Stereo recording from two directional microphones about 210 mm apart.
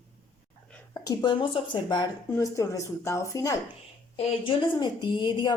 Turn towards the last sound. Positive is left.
turn(degrees=20)  # may be behind; listen again after turning